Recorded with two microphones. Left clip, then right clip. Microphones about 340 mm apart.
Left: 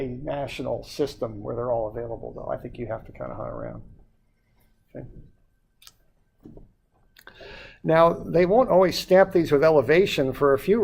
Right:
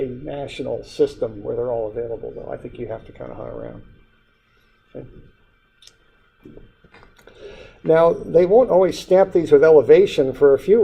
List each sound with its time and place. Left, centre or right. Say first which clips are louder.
0.3 s speech: right 2 dB; left
3.2 s speech: right 1 dB; left
7.3 s speech: right 2 dB; left